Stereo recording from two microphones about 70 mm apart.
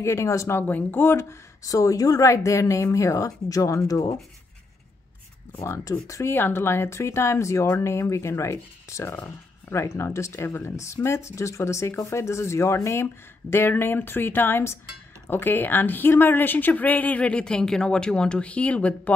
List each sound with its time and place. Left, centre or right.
0.0 s speech: left
0.6 s speech: left
1.6 s speech: left
6.0 s speech: left
6.3 s speech: left